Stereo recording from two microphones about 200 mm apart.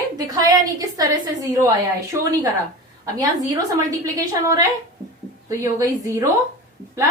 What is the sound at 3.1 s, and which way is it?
A woman's voice, 15° right (ahead or behind).